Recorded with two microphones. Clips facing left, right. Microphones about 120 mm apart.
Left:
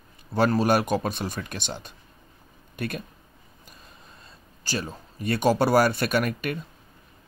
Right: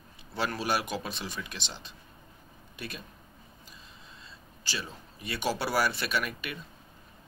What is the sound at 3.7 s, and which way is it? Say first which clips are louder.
Speech: left 3 dB; 50° left (ahead or behind).